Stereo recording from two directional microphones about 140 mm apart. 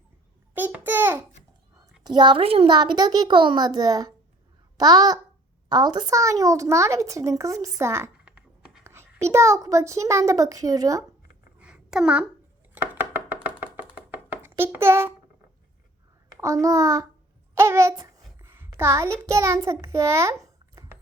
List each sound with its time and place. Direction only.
0.5 s babbling: 15° right (ahead or behind)
2.0 s a child's voice: 35° right (ahead or behind)
8.2 s a child's voice: 10° right (ahead or behind); by 11.0 s 25° right (ahead or behind)
11.6 s a sound: 5° right (ahead or behind)
12.7 s music: 15° right (ahead or behind)
16.4 s a child's voice: 25° right (ahead or behind)